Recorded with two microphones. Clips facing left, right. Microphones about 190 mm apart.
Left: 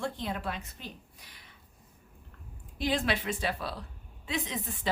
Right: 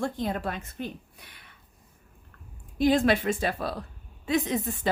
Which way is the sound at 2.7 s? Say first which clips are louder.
Right 8 dB; 45° right (ahead or behind).